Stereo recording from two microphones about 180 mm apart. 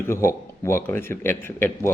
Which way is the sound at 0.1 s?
15° left (ahead or behind).